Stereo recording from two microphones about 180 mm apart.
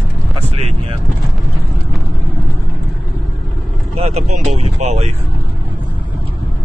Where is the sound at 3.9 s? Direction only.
35° right (ahead or behind).